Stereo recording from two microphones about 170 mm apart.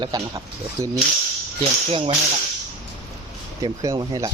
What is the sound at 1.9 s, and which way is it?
Speech, 35° right (ahead or behind).